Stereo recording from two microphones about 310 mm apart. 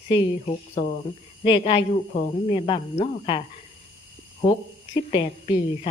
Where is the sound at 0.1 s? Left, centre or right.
Centre.